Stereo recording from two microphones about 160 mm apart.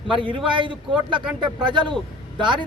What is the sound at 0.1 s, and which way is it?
Speech, 30° right (ahead or behind).